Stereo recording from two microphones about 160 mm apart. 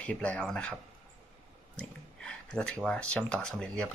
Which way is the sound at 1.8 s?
5° left (ahead or behind).